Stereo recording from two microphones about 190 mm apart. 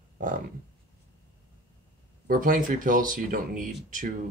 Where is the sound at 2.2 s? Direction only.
45° right (ahead or behind).